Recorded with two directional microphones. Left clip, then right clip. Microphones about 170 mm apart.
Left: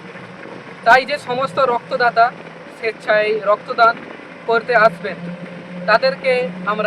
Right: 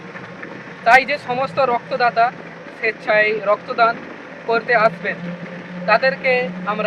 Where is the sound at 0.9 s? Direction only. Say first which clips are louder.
Even; 15° left (ahead or behind).